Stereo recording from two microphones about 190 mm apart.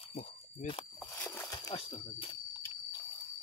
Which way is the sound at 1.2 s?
10° left (ahead or behind).